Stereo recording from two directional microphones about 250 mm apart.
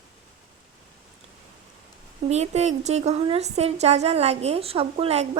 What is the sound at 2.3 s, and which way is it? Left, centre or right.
A woman's voice, right.